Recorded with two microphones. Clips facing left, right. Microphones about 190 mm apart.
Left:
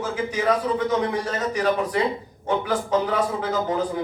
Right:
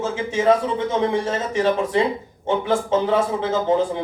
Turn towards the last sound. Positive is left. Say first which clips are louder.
# right 4 dB
turn(degrees=-25)  # may be behind; listen again after turning